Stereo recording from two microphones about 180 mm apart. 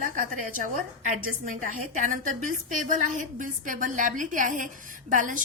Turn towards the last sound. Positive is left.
turn(degrees=-45)  # may be behind; listen again after turning